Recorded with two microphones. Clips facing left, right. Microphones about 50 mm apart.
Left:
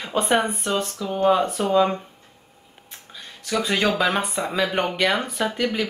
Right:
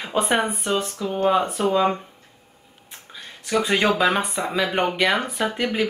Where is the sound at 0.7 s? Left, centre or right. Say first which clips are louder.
Right 1 dB; centre.